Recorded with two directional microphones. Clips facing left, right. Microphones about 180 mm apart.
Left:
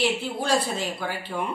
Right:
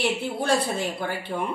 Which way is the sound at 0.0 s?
60° right (ahead or behind).